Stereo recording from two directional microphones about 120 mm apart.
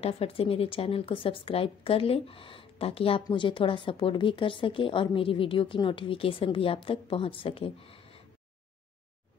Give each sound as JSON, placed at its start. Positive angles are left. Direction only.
{"t": 0.0, "sound": "a woman's voice", "side_deg": 55}